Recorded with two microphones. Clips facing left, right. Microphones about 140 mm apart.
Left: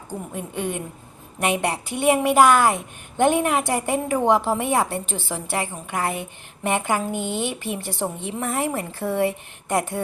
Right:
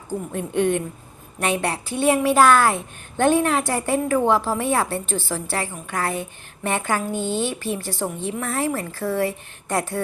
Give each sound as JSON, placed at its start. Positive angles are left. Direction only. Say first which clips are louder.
{"t": 0.3, "sound": "a woman's voice", "louder": "right 7 dB", "side_deg": 5}